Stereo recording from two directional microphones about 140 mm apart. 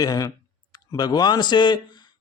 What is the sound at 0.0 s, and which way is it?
Speech, 25° left (ahead or behind).